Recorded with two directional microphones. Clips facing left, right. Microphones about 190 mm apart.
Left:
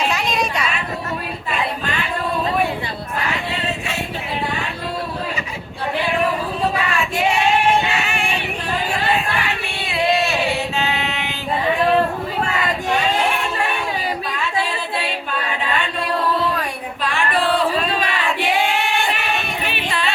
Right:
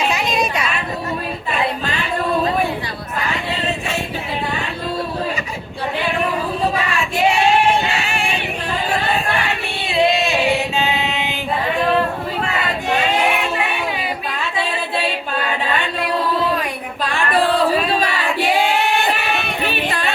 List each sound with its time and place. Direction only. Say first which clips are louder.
9.9 s a sound: right 2 dB; 20° right (ahead or behind)
10.8 s mantra: right 2 dB; 15° right (ahead or behind)
19.6 s music: right 4 dB; 40° right (ahead or behind)